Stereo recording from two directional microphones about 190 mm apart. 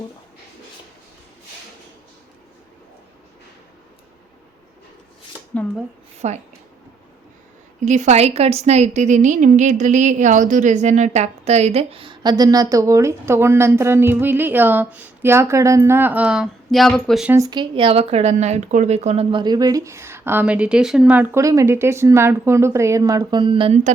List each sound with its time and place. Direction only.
6.2 s speech: 35° right (ahead or behind)
7.8 s a woman's voice: 40° right (ahead or behind); by 17.3 s centre (ahead or behind)
17.3 s speech: 20° right (ahead or behind)